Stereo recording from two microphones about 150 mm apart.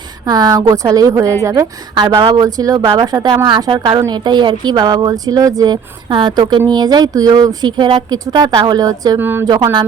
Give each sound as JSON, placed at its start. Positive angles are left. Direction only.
{"t": 0.3, "sound": "a woman's voice", "side_deg": -25}
{"t": 9.1, "sound": "a woman's voice", "side_deg": -15}